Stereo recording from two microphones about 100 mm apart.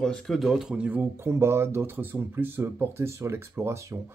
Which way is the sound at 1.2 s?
25° right (ahead or behind).